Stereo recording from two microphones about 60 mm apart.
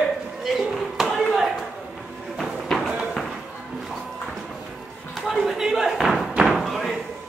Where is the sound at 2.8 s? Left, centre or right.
Centre.